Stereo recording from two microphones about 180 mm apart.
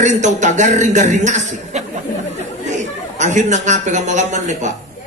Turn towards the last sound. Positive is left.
turn(degrees=-40)  # may be behind; listen again after turning